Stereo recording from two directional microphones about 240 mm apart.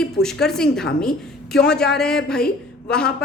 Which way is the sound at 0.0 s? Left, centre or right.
Centre.